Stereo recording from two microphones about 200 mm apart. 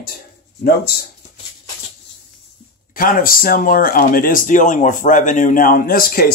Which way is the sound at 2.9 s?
45° left (ahead or behind).